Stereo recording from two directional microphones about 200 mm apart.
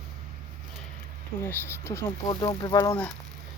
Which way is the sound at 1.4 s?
10° left (ahead or behind).